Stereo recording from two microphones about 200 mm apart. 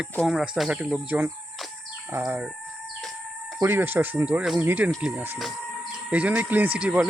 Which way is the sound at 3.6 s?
10° right (ahead or behind).